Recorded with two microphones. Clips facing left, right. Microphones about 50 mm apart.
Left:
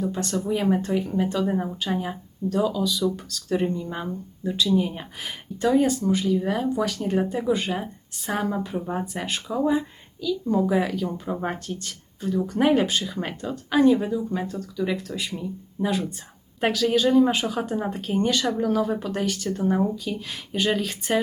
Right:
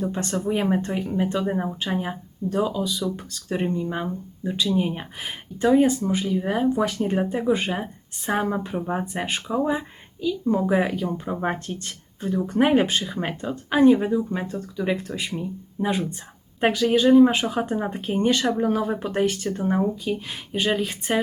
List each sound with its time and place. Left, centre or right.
0.0 s speech: right
17.3 s speech: right